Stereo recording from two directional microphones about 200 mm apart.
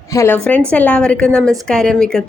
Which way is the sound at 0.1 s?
15° left (ahead or behind).